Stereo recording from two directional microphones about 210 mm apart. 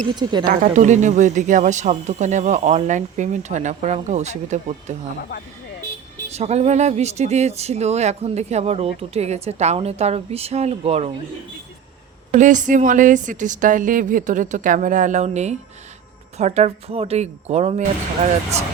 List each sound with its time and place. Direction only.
0.2 s speech: 20° right (ahead or behind)
0.4 s speech: 40° right (ahead or behind)
6.3 s speech: 30° right (ahead or behind)
12.3 s speech: 35° right (ahead or behind)